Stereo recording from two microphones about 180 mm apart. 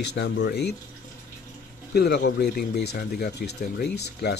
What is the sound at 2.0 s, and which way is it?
Speech, 65° left (ahead or behind).